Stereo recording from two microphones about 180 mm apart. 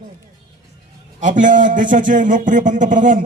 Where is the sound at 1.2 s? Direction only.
45° right (ahead or behind).